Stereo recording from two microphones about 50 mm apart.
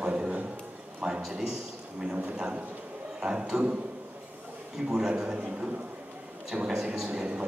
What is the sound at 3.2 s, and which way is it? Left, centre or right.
Speech, centre.